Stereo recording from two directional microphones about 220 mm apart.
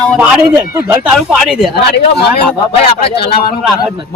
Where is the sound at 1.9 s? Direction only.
50° left (ahead or behind).